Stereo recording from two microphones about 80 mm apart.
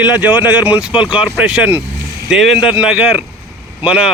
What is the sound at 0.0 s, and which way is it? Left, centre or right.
Speech, centre.